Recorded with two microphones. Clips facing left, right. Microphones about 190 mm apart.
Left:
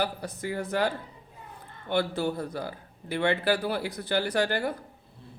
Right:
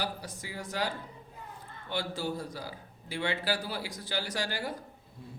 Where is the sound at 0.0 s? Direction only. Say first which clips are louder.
Left 7 dB; 60° left (ahead or behind).